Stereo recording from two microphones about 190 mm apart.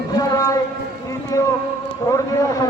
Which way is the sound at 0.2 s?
20° left (ahead or behind).